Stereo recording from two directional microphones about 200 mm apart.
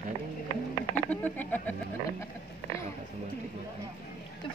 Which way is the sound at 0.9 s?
10° left (ahead or behind).